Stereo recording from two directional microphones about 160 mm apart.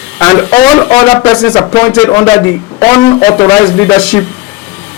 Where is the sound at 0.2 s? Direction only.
15° left (ahead or behind).